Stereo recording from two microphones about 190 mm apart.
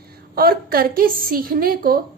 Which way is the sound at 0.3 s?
50° right (ahead or behind).